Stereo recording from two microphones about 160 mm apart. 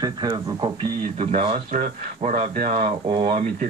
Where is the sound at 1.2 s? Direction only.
40° right (ahead or behind).